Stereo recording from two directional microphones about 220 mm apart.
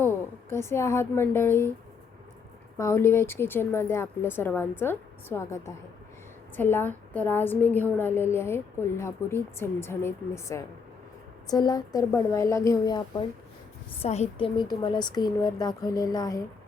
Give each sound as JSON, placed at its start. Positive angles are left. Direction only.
{"t": 0.0, "sound": "a woman's voice", "side_deg": 10}
{"t": 2.7, "sound": "a woman's voice", "side_deg": 10}
{"t": 14.0, "sound": "a woman's voice", "side_deg": 30}